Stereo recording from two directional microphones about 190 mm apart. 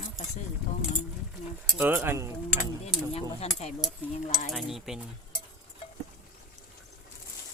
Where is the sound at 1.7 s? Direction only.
10° right (ahead or behind).